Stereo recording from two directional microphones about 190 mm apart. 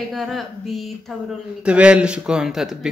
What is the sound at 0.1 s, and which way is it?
Speech, centre (ahead or behind).